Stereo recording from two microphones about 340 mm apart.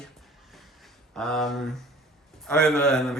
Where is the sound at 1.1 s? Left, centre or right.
Centre.